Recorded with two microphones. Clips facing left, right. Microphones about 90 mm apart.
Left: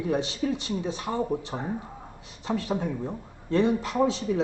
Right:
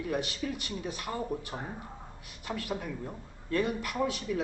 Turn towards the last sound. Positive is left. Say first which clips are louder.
# left 7 dB
turn(degrees=25)  # may be behind; listen again after turning